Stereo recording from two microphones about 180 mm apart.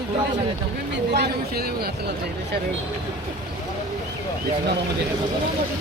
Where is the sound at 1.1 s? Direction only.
60° right (ahead or behind).